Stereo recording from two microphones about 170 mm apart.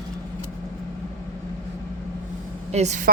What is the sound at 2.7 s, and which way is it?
Speech, 40° right (ahead or behind).